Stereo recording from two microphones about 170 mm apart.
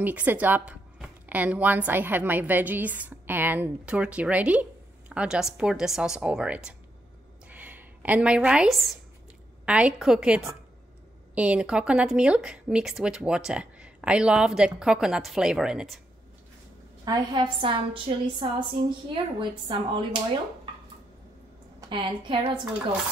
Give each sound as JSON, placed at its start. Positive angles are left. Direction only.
{"t": 0.0, "sound": "a woman's voice", "side_deg": -10}
{"t": 7.4, "sound": "a sound", "side_deg": -10}
{"t": 9.7, "sound": "a woman's voice", "side_deg": -5}
{"t": 17.0, "sound": "a woman's voice", "side_deg": -25}
{"t": 21.8, "sound": "a woman's voice", "side_deg": -30}